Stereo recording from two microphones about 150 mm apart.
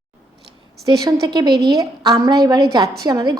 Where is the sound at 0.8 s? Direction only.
25° right (ahead or behind).